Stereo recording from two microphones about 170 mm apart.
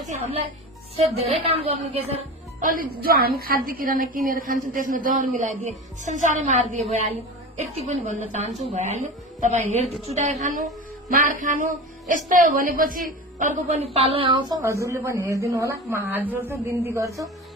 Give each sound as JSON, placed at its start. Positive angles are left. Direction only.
{"t": 0.0, "sound": "a woman's voice", "side_deg": -40}
{"t": 2.1, "sound": "a woman's voice", "side_deg": -50}
{"t": 10.5, "sound": "speech", "side_deg": 0}
{"t": 11.1, "sound": "a woman's voice", "side_deg": -50}
{"t": 14.6, "sound": "speech", "side_deg": -15}